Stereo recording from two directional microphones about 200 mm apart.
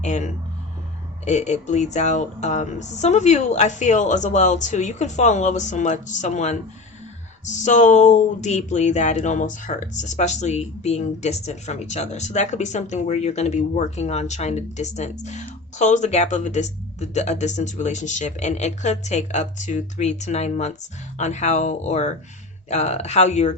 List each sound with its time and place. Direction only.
0.0 s speech: 35° left (ahead or behind)